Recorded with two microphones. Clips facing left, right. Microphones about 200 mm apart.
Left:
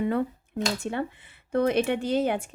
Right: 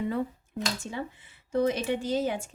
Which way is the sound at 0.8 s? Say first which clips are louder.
Left 6 dB; 60° left (ahead or behind).